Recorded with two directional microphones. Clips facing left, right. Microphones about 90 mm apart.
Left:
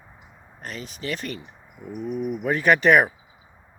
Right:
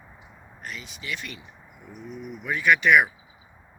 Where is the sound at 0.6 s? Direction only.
40° left (ahead or behind).